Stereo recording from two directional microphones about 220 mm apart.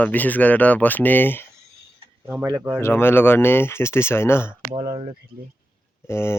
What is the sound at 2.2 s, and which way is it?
Speech, 10° right (ahead or behind).